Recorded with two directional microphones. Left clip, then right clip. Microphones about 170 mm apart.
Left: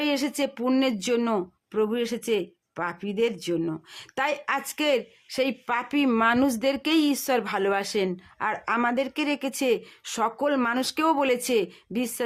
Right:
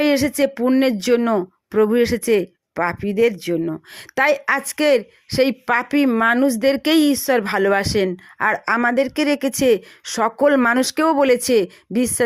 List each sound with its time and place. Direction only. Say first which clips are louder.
0.0 s speech: right 9 dB; 30° right (ahead or behind)
6.1 s a woman's voice: right 3 dB; 20° right (ahead or behind); by 12.2 s 35° right (ahead or behind)